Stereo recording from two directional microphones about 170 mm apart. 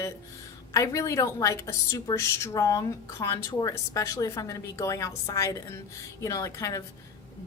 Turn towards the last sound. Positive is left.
turn(degrees=20)  # may be behind; listen again after turning